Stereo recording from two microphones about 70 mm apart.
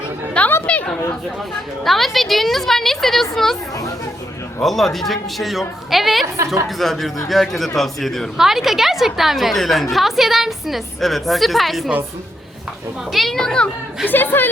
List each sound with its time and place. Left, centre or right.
0.4 s chatter: centre
1.8 s a woman's voice: centre
4.6 s a woman's voice: centre
13.1 s a child's voice: centre
14.1 s speech: left